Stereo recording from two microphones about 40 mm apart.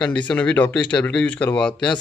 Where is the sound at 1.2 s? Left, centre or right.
Left.